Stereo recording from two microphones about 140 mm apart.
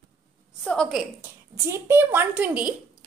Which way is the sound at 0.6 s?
5° left (ahead or behind).